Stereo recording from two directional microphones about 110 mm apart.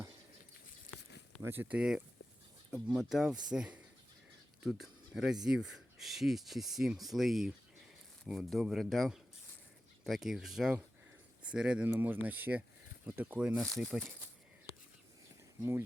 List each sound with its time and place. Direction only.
1.4 s speech: 20° right (ahead or behind)
4.8 s speech: 5° right (ahead or behind)
13.6 s speech: centre (ahead or behind)